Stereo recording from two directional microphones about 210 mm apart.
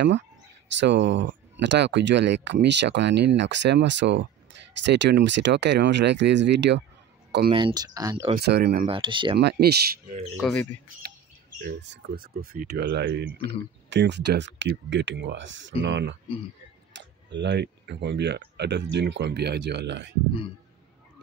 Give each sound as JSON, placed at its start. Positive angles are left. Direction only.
{"t": 0.7, "sound": "speech", "side_deg": -55}
{"t": 7.5, "sound": "speech", "side_deg": -20}
{"t": 8.4, "sound": "speech", "side_deg": -50}
{"t": 8.8, "sound": "speech", "side_deg": -25}
{"t": 9.4, "sound": "speech", "side_deg": -50}
{"t": 10.5, "sound": "speech", "side_deg": 10}
{"t": 11.6, "sound": "speech", "side_deg": -50}